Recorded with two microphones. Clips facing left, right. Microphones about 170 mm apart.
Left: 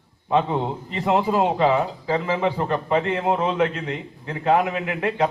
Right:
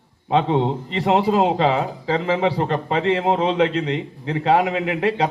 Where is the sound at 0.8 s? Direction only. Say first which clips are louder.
Right 3 dB; 85° right.